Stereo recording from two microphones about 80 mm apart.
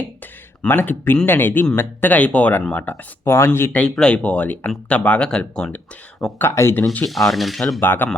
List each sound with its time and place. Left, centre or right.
0.7 s speech: left
3.7 s speech: centre
6.5 s speech: left
7.0 s cutlery: centre
7.8 s speech: left